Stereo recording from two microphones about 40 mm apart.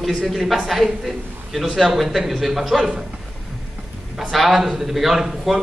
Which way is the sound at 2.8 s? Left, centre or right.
Centre.